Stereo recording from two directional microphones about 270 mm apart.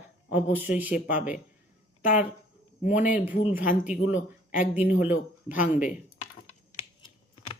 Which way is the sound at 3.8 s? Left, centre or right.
Centre.